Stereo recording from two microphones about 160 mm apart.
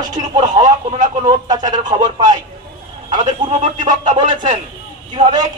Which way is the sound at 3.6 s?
30° right (ahead or behind).